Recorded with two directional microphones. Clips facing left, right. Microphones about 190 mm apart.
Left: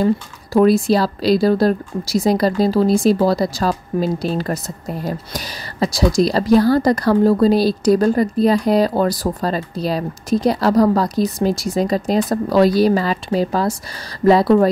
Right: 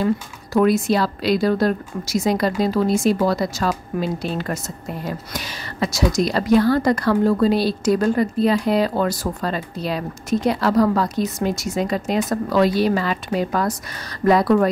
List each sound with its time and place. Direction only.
0.0 s speech: 35° left (ahead or behind)